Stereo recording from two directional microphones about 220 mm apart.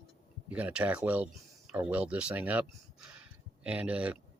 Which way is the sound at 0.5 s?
5° right (ahead or behind).